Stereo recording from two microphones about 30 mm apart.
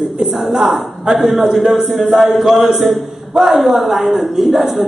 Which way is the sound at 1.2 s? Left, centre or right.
Centre.